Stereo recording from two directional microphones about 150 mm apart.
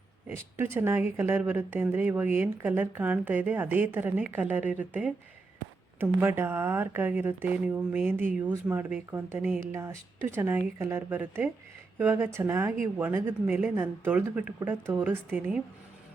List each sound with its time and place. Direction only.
0.3 s speech: 15° right (ahead or behind)